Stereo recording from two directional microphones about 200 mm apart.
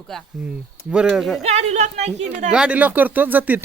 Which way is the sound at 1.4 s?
35° right (ahead or behind).